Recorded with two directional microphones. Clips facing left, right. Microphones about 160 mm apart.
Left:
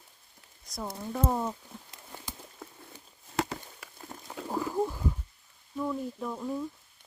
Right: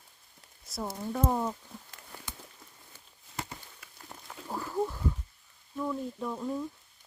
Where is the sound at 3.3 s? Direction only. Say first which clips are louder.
Left 9 dB; 90° left.